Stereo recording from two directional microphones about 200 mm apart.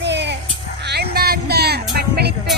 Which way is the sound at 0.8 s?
55° right (ahead or behind).